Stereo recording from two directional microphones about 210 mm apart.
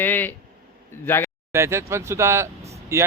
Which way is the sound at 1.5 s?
10° right (ahead or behind).